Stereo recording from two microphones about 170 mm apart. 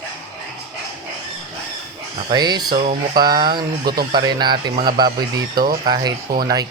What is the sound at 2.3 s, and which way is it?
Speech, 25° right (ahead or behind).